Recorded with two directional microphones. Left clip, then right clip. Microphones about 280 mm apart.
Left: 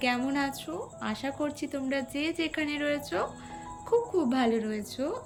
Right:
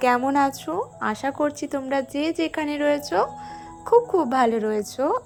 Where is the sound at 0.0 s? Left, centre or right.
Centre.